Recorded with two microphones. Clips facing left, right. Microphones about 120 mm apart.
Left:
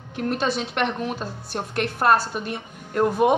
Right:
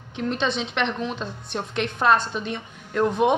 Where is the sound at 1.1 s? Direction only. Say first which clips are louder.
Even; 5° left (ahead or behind).